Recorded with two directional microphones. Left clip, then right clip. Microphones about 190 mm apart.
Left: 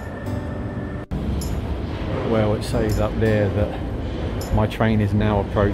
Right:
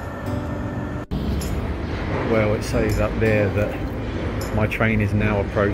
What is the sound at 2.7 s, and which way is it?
Speech, centre (ahead or behind).